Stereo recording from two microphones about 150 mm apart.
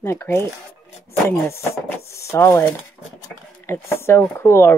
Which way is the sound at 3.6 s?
15° left (ahead or behind).